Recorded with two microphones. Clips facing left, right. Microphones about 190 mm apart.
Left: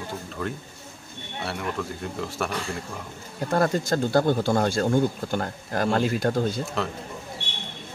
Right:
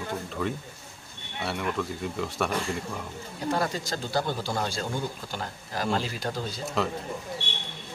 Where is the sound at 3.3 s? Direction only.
50° left (ahead or behind).